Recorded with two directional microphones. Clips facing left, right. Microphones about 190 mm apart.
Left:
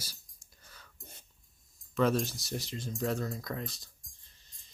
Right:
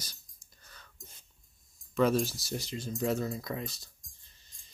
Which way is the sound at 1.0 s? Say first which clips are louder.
Left 2 dB; 60° left (ahead or behind).